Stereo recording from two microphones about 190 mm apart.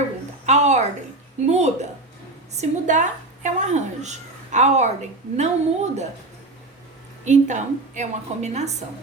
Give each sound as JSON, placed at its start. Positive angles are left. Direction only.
{"t": 0.4, "sound": "a sound", "side_deg": -35}
{"t": 2.6, "sound": "a woman's voice", "side_deg": -40}
{"t": 7.3, "sound": "a woman's voice", "side_deg": -40}